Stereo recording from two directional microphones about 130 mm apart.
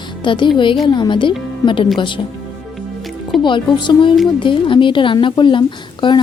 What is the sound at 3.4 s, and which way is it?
A woman's voice, 35° left (ahead or behind).